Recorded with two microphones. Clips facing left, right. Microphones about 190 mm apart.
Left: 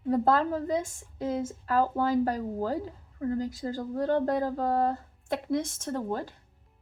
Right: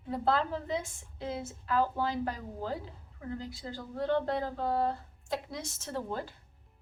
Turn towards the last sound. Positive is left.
turn(degrees=45)  # may be behind; listen again after turning